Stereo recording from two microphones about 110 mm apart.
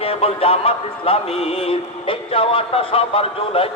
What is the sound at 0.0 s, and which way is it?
Music, 60° left (ahead or behind).